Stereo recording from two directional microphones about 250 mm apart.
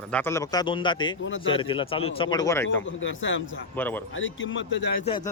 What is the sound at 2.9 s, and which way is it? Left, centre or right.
Speech, left.